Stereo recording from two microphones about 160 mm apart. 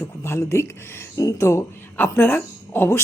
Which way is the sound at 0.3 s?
15° left (ahead or behind).